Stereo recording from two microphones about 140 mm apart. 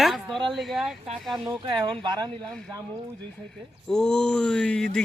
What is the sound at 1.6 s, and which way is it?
Speech, 35° right (ahead or behind).